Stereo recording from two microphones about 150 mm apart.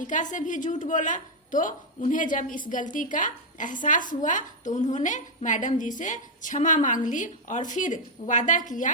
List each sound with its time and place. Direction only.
0.0 s a woman's voice: 55° left (ahead or behind)